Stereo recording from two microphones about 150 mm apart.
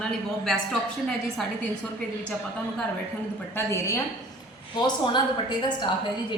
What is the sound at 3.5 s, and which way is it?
Speech, 20° left (ahead or behind).